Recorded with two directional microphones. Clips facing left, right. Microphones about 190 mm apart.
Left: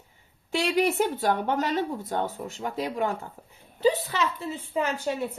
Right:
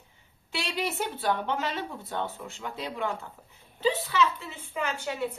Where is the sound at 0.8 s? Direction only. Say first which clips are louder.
Left 7 dB; 15° left (ahead or behind).